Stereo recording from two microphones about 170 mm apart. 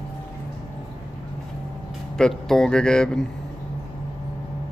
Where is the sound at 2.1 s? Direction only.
5° left (ahead or behind).